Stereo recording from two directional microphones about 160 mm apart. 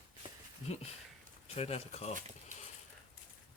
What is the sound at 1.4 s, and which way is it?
Speech, 40° left (ahead or behind).